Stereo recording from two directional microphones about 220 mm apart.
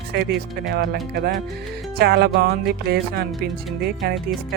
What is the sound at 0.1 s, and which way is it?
Speech, 50° right (ahead or behind).